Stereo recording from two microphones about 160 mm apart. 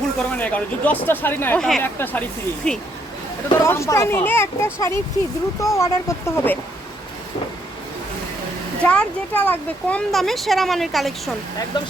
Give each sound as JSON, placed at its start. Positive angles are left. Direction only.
{"t": 0.2, "sound": "speech", "side_deg": 10}
{"t": 3.6, "sound": "speech", "side_deg": 20}
{"t": 8.8, "sound": "speech", "side_deg": 10}
{"t": 11.7, "sound": "speech", "side_deg": 25}